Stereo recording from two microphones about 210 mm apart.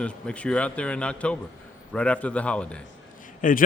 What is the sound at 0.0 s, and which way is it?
A man's voice, 5° left (ahead or behind).